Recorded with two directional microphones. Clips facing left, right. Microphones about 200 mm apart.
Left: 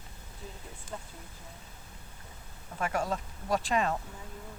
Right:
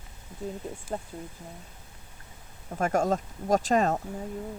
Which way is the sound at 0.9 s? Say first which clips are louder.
Right 8 dB; 45° right (ahead or behind).